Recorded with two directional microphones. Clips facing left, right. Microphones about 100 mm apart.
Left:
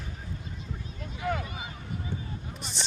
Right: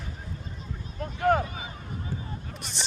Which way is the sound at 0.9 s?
50° right (ahead or behind).